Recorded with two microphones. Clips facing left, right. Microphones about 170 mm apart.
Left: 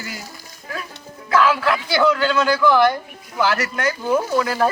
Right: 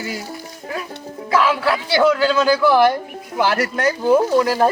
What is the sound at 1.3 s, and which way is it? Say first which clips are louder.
Speech: even; 30° right (ahead or behind).